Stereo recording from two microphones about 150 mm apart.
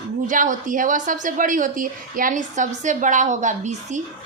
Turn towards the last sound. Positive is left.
turn(degrees=-50)  # may be behind; listen again after turning